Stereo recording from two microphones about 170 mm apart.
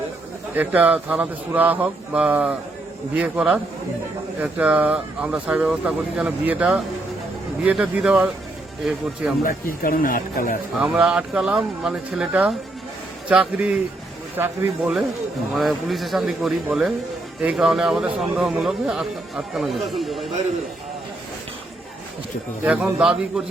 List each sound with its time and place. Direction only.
0.5 s a man's voice: 10° right (ahead or behind)
9.4 s speech: 55° left (ahead or behind)
10.8 s a man's voice: 5° right (ahead or behind)
22.6 s speech: 5° right (ahead or behind)